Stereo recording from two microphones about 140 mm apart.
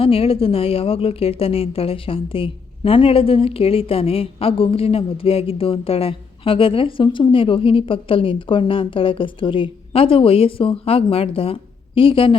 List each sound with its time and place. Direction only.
0.0 s a woman's voice: 40° left (ahead or behind)